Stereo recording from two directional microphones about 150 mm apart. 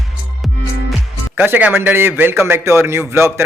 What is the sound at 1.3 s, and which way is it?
A man's voice, 10° right (ahead or behind).